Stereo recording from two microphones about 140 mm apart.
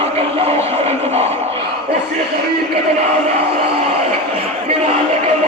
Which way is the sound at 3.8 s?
45° right (ahead or behind).